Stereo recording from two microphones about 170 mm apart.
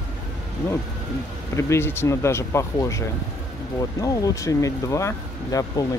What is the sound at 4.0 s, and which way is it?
Speech, 20° left (ahead or behind).